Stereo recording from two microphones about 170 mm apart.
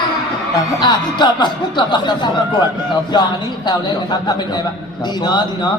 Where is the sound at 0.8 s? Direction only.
25° left (ahead or behind).